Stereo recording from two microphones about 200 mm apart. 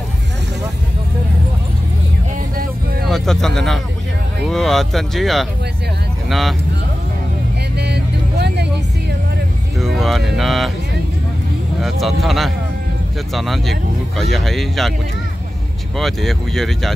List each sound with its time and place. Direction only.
3.1 s speech: centre (ahead or behind)
7.7 s vehicle: 55° right (ahead or behind)
9.8 s a sound: centre (ahead or behind)
11.8 s speech: centre (ahead or behind)
16.0 s speech: centre (ahead or behind)